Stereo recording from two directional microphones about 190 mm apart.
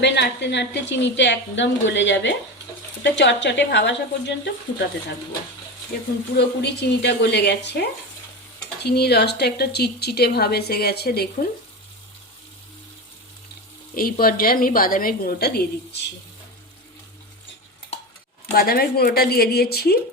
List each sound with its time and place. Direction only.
0.0 s a woman's voice: 65° left (ahead or behind)
6.3 s a woman's voice: 65° left (ahead or behind)
13.9 s a woman's voice: 50° left (ahead or behind)
18.5 s a woman's voice: 50° left (ahead or behind)